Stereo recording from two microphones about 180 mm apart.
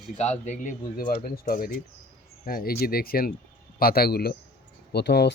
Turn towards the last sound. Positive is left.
turn(degrees=65)  # may be behind; listen again after turning